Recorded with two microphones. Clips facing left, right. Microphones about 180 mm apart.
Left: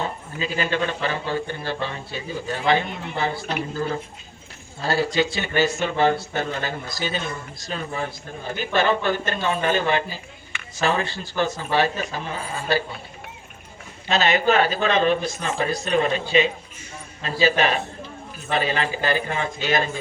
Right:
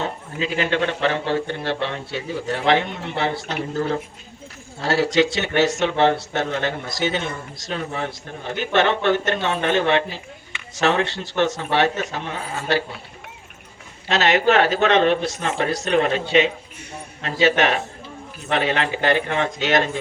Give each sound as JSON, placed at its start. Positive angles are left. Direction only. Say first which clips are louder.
{"t": 0.0, "sound": "speech", "louder": "right 2 dB", "side_deg": -75}
{"t": 4.8, "sound": "speech", "louder": "right 3 dB", "side_deg": -80}
{"t": 14.1, "sound": "speech", "louder": "right 2 dB", "side_deg": -80}